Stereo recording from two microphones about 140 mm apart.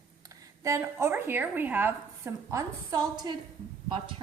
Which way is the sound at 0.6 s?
20° right (ahead or behind).